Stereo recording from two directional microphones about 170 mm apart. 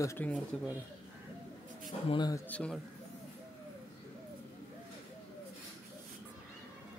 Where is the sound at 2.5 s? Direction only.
5° left (ahead or behind).